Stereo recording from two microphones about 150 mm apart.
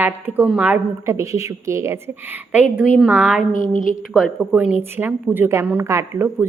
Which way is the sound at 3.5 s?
60° left (ahead or behind).